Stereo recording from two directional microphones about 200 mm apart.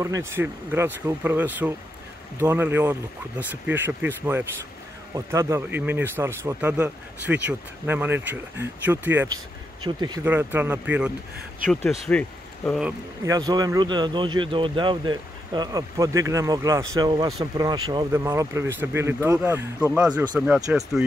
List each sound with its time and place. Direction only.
0.0 s speech: 15° right (ahead or behind)
9.8 s speech: 20° right (ahead or behind)
11.7 s speech: centre (ahead or behind)
13.2 s speech: 20° right (ahead or behind)